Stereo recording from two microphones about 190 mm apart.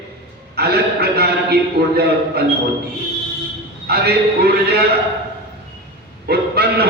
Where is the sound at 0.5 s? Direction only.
55° right (ahead or behind).